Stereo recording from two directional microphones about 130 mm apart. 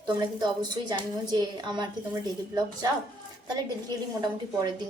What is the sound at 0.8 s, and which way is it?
A woman's voice, 30° right (ahead or behind).